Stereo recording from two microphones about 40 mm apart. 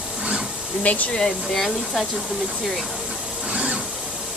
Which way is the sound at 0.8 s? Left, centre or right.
Left.